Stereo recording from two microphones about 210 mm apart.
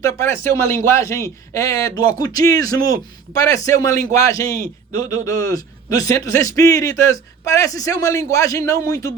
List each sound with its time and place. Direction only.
0.0 s a man's voice: 10° left (ahead or behind)